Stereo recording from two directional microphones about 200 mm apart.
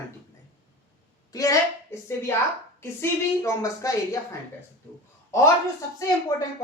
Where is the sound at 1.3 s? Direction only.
15° left (ahead or behind).